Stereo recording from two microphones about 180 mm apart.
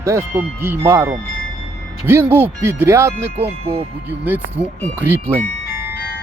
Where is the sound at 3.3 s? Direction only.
35° right (ahead or behind).